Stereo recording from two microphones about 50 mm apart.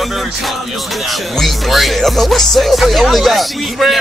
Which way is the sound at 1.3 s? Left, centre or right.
Centre.